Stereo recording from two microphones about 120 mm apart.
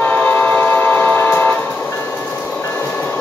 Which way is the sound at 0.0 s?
15° left (ahead or behind).